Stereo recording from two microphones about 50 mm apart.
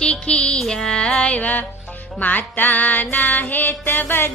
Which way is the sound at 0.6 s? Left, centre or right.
Centre.